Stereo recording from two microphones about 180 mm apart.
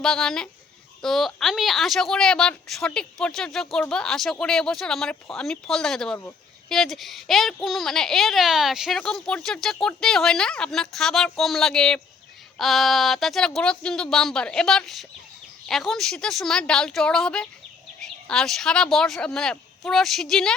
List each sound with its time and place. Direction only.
0.0 s speech: 5° left (ahead or behind)